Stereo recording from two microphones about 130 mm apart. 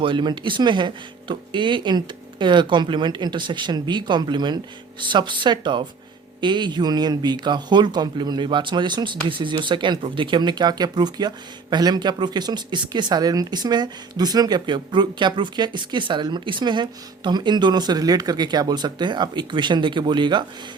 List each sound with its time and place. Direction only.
0.0 s speech: 40° right (ahead or behind)